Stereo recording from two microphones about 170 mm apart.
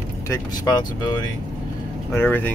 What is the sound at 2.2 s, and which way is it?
Speech, 10° left (ahead or behind).